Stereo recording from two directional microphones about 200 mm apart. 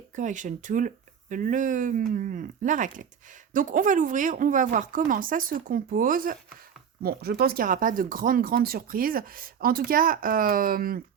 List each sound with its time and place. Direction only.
0.2 s speech: 40° right (ahead or behind)